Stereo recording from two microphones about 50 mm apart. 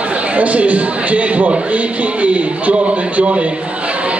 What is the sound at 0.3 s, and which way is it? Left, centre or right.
A man's voice, right.